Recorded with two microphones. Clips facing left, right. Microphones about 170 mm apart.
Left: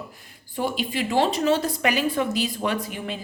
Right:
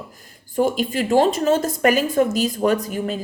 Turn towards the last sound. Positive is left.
turn(degrees=-40)  # may be behind; listen again after turning